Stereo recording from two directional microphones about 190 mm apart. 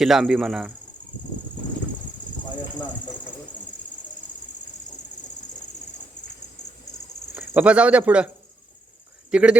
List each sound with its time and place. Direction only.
0.0 s a man's voice: centre (ahead or behind)
7.3 s speech: 10° right (ahead or behind)
9.3 s a man's voice: 5° right (ahead or behind)